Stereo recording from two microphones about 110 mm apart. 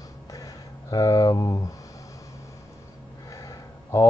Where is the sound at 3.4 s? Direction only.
30° left (ahead or behind).